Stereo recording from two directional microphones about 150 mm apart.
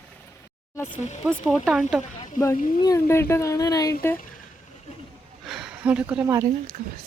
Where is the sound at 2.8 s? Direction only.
25° left (ahead or behind).